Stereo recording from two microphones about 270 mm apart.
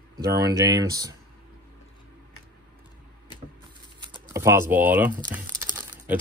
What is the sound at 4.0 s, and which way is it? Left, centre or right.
Typing, centre.